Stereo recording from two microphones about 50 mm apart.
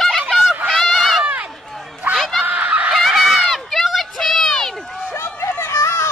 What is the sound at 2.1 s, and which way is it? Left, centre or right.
Snicker, centre.